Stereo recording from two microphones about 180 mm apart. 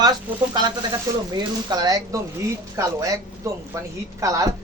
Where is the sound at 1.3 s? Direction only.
20° right (ahead or behind).